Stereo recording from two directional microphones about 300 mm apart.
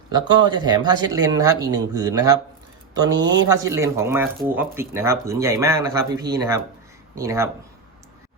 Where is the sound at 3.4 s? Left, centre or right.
Centre.